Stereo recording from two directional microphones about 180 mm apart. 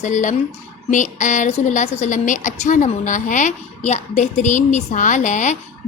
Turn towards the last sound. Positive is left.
turn(degrees=40)  # may be behind; listen again after turning